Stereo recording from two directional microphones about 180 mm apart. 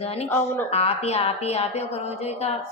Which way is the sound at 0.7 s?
35° left (ahead or behind).